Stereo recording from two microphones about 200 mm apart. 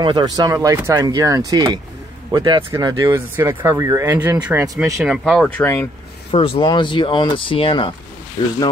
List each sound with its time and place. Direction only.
0.0 s speech: 20° right (ahead or behind)
3.1 s speech: 10° right (ahead or behind)
5.0 s speech: 5° right (ahead or behind)
5.6 s speech: 10° left (ahead or behind)
6.3 s speech: 30° left (ahead or behind)